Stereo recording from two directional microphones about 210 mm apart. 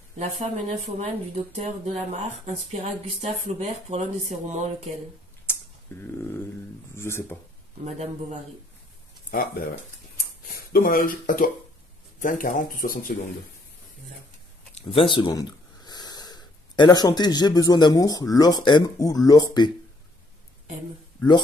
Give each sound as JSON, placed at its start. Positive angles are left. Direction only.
{"t": 0.2, "sound": "speech", "side_deg": -35}
{"t": 2.7, "sound": "speech", "side_deg": -35}
{"t": 5.9, "sound": "a sound", "side_deg": 10}
{"t": 7.0, "sound": "speech", "side_deg": 10}
{"t": 7.8, "sound": "speech", "side_deg": -30}
{"t": 9.3, "sound": "speech", "side_deg": 45}
{"t": 10.7, "sound": "speech", "side_deg": 45}
{"t": 14.8, "sound": "speech", "side_deg": 25}